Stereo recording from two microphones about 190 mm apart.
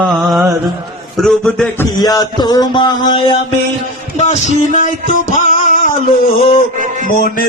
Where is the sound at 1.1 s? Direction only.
Centre (ahead or behind).